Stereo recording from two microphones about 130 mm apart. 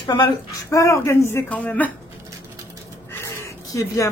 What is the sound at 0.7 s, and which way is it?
Speech, 20° left (ahead or behind).